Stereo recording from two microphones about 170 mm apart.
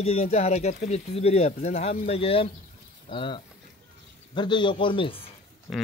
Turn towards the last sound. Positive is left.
turn(degrees=0)  # may be behind; listen again after turning